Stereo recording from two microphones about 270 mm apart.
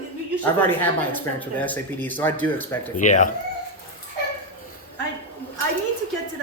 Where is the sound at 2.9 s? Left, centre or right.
Left.